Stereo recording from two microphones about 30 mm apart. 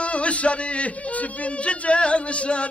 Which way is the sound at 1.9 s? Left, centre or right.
Left.